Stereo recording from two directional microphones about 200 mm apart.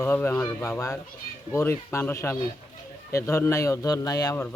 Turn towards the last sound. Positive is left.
turn(degrees=15)  # may be behind; listen again after turning